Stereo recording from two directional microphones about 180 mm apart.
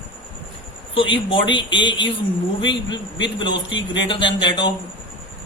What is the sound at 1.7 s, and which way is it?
Speech, 90° left.